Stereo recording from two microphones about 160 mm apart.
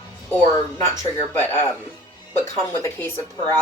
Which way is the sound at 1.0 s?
15° left (ahead or behind).